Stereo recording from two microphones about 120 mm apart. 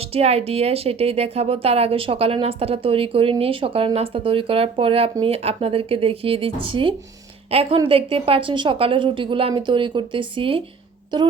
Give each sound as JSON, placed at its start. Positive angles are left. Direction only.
{"t": 0.0, "sound": "a woman's voice", "side_deg": -55}